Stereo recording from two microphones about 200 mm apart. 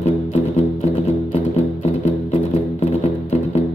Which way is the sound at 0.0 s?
30° left (ahead or behind).